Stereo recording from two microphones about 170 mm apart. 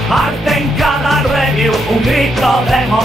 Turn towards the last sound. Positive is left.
turn(degrees=0)  # may be behind; listen again after turning